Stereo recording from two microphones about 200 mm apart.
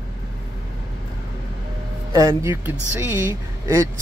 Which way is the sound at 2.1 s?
15° right (ahead or behind).